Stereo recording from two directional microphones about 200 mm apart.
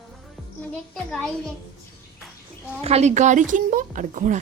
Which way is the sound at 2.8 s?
35° right (ahead or behind).